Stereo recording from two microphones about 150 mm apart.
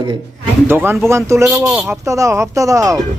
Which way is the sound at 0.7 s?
15° right (ahead or behind).